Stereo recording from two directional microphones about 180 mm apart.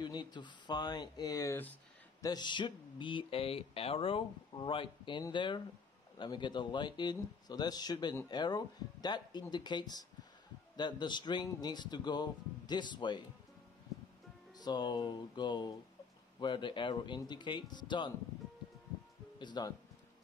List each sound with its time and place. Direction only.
0.0 s speech: 25° left (ahead or behind)
2.2 s speech: 25° left (ahead or behind)
14.6 s speech: 25° left (ahead or behind)
19.3 s speech: 25° left (ahead or behind)